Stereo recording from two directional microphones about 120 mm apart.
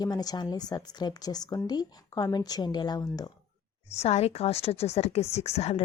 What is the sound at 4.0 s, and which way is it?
A woman's voice, 60° left (ahead or behind).